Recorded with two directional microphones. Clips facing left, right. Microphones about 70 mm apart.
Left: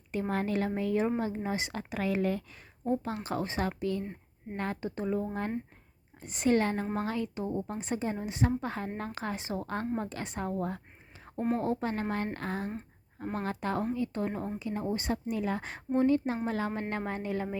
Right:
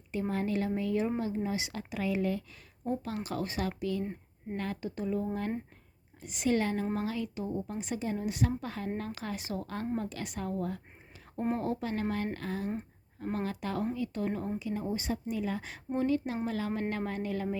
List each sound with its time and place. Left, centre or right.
0.3 s a woman's voice: left
2.8 s a woman's voice: left
6.2 s a woman's voice: left
16.0 s a woman's voice: left